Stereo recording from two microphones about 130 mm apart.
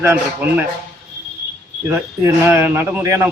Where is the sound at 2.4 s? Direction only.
20° right (ahead or behind).